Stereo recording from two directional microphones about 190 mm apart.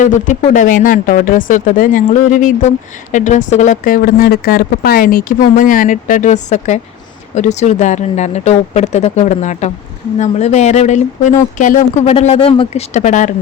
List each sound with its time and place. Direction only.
0.0 s speech: 40° left (ahead or behind)